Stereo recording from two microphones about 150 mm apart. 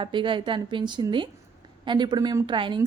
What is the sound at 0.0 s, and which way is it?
A woman's voice, 35° right (ahead or behind).